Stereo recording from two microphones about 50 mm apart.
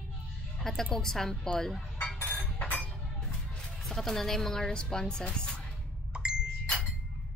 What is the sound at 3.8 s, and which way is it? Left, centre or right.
A woman's voice, centre.